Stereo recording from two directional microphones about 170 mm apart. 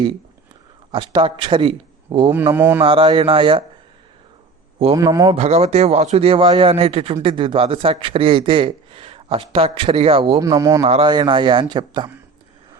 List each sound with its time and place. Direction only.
0.9 s a man's voice: 30° right (ahead or behind)
2.3 s speech: 10° right (ahead or behind)
2.8 s speech: 30° right (ahead or behind)
4.9 s speech: 20° right (ahead or behind)
5.3 s speech: 40° right (ahead or behind)
10.4 s speech: 20° right (ahead or behind)
10.8 s speech: 30° right (ahead or behind)